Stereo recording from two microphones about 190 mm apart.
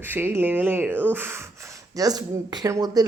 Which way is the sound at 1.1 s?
10° right (ahead or behind).